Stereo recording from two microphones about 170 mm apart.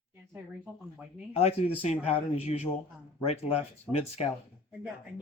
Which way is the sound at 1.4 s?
35° left (ahead or behind).